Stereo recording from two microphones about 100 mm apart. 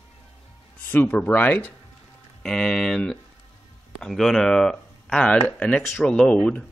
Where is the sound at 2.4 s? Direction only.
5° left (ahead or behind).